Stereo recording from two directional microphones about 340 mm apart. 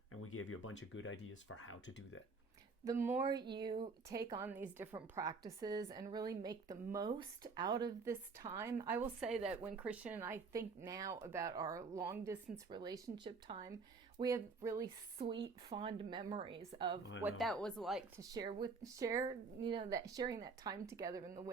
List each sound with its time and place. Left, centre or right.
0.1 s speech: left
2.8 s a woman's voice: centre
17.0 s speech: left
17.2 s speech: centre
18.2 s a woman's voice: centre